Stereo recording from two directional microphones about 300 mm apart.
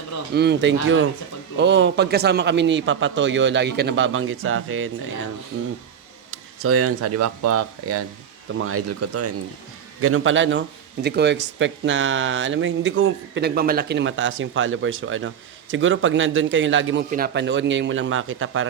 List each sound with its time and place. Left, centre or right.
0.3 s speech: right
6.3 s speech: right